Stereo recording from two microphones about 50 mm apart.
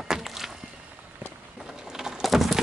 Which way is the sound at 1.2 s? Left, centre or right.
Right.